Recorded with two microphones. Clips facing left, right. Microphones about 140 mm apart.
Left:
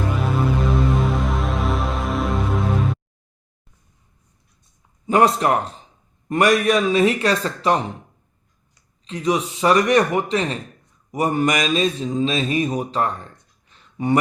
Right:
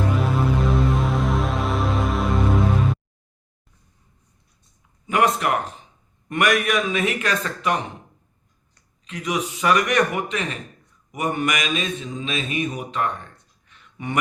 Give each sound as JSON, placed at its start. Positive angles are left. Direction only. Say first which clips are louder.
{"t": 0.1, "sound": "music", "louder": "even", "side_deg": 0}
{"t": 5.0, "sound": "a man's voice", "louder": "left 4 dB", "side_deg": 30}
{"t": 9.0, "sound": "a man's voice", "louder": "left 5 dB", "side_deg": 30}